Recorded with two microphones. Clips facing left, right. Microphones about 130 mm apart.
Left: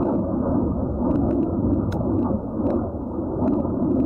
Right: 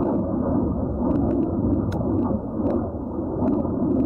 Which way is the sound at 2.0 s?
30° left (ahead or behind).